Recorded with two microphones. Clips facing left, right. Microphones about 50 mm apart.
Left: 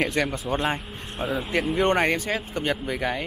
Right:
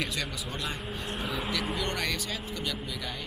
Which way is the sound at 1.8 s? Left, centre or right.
Left.